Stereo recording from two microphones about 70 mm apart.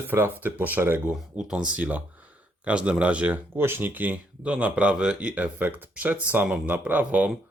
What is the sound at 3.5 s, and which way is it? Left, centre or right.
Speech, right.